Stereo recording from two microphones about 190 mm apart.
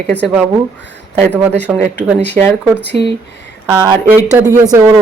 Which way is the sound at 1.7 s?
5° right (ahead or behind).